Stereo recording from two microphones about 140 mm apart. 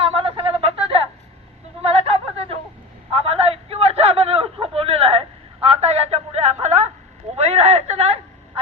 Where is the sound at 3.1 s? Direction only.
45° right (ahead or behind).